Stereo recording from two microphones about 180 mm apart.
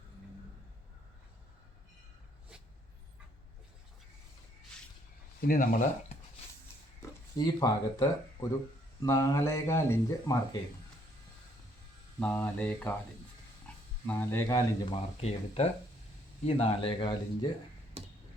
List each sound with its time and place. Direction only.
5.4 s speech: 55° left (ahead or behind)
7.3 s speech: 20° left (ahead or behind)
12.2 s speech: 10° left (ahead or behind)
14.1 s speech: 10° left (ahead or behind)
14.8 s speech: 35° left (ahead or behind)
18.0 s a sound: 35° right (ahead or behind)